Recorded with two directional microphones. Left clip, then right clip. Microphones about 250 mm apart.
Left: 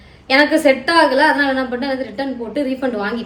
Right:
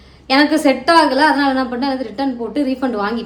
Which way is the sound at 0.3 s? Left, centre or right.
Centre.